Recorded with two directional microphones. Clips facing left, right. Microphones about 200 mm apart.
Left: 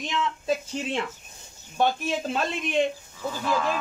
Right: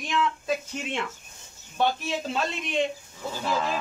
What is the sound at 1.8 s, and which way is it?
Speech, 45° left (ahead or behind).